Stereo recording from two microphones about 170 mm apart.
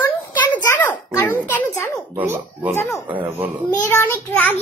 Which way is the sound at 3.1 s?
10° right (ahead or behind).